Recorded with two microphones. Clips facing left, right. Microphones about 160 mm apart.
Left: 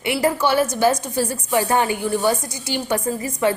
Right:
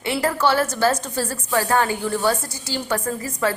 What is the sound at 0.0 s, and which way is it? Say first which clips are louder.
A woman's voice: left 1 dB; 15° left (ahead or behind).